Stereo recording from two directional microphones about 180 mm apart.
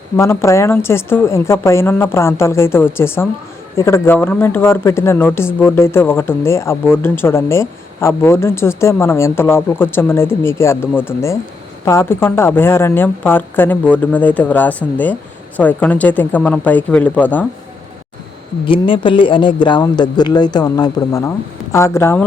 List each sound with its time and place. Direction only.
0.2 s speech: 15° left (ahead or behind)
18.6 s speech: 30° left (ahead or behind); by 22.3 s 10° left (ahead or behind)